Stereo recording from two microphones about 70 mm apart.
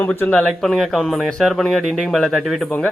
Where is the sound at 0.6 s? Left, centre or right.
Centre.